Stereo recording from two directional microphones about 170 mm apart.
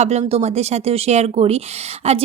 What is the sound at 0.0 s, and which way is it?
Speech, 40° right (ahead or behind).